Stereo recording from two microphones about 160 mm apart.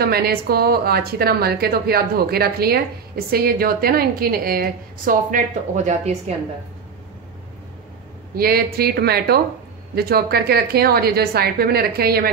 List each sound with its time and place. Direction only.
0.0 s a woman's voice: 75° right (ahead or behind); by 6.3 s 45° right (ahead or behind)
8.4 s a woman's voice: 70° right (ahead or behind)